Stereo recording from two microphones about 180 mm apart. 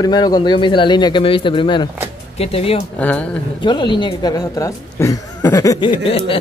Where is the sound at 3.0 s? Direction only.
5° left (ahead or behind).